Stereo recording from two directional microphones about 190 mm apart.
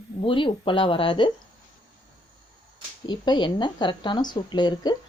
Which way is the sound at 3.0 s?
25° left (ahead or behind).